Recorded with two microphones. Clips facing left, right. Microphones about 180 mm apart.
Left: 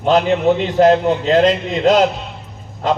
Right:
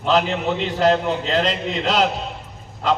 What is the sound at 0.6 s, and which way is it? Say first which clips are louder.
A man's voice: left 3 dB; 45° left (ahead or behind).